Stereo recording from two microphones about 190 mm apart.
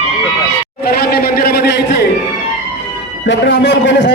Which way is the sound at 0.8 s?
55° left (ahead or behind).